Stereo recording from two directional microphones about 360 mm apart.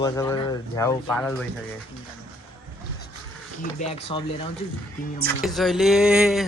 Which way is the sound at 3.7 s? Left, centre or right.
Centre.